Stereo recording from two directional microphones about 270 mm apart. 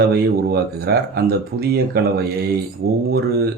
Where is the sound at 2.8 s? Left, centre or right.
Right.